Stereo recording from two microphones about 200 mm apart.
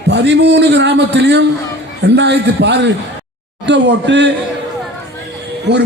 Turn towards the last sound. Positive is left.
turn(degrees=-60)  # may be behind; listen again after turning